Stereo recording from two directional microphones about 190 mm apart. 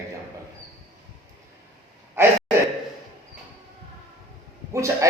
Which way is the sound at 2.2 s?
15° right (ahead or behind).